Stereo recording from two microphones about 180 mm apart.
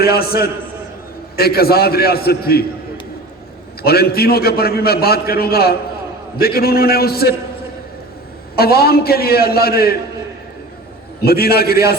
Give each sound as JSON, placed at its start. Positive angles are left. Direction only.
{"t": 0.0, "sound": "a man's voice", "side_deg": 60}
{"t": 3.8, "sound": "a man's voice", "side_deg": 60}
{"t": 8.5, "sound": "a man's voice", "side_deg": 60}
{"t": 11.2, "sound": "a man's voice", "side_deg": 60}